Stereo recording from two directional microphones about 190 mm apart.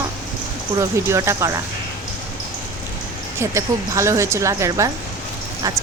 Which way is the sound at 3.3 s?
15° right (ahead or behind).